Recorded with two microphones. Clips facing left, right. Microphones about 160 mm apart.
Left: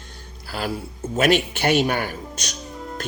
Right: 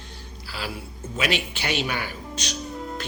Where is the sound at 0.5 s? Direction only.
45° left (ahead or behind).